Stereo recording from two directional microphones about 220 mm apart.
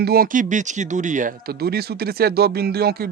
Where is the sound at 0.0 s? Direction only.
45° right (ahead or behind).